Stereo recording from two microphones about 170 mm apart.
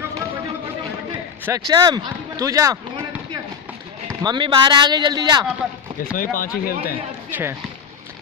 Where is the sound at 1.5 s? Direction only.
25° right (ahead or behind).